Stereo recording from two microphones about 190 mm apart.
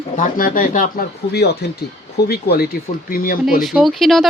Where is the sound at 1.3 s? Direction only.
60° left (ahead or behind).